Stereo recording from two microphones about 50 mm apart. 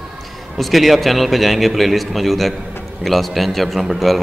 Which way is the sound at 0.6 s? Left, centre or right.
Centre.